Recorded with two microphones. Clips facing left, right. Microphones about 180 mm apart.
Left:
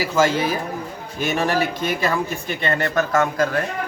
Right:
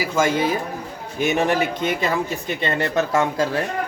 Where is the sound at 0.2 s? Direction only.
15° right (ahead or behind).